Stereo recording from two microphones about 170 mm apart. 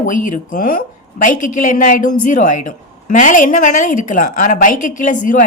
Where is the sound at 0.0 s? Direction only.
50° left (ahead or behind).